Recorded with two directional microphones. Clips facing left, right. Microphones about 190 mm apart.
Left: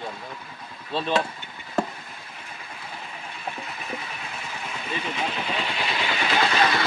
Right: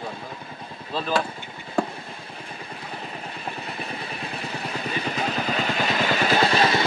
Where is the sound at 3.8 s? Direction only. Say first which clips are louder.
Right 2 dB; 35° right (ahead or behind).